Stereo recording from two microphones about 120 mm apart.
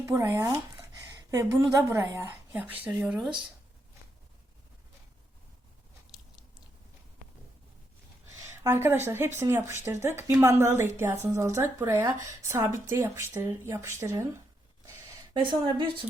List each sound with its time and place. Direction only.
0.0 s a sound: 20° right (ahead or behind)
1.9 s speech: 20° right (ahead or behind)
8.4 s a woman's voice: 20° right (ahead or behind)
15.3 s a woman's voice: 45° right (ahead or behind)